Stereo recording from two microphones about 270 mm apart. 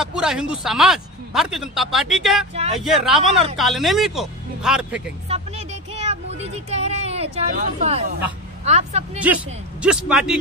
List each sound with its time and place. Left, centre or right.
0.0 s speech: centre
5.3 s a sound: right
7.5 s speech: right
9.2 s speech: centre